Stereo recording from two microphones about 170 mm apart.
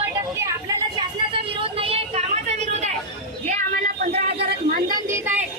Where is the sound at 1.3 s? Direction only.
30° right (ahead or behind); by 5.0 s 70° right (ahead or behind).